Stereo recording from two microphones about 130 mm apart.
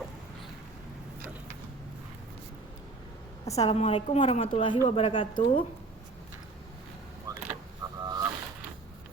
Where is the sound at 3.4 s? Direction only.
25° left (ahead or behind).